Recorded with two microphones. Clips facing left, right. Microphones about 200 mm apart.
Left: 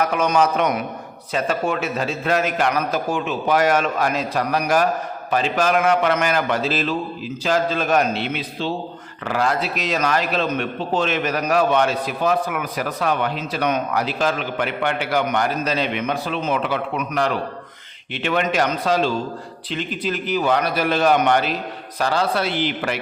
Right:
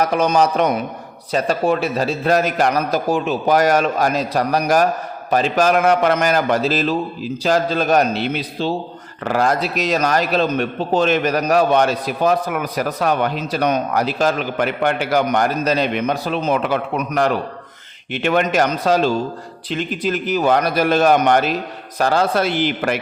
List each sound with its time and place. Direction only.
0.0 s a man's voice: 35° right (ahead or behind)